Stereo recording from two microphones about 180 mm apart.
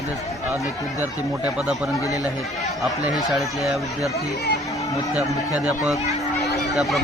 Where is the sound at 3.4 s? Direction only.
Centre (ahead or behind).